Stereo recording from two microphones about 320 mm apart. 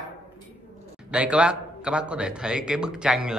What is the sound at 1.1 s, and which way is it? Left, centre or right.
A man's voice, centre.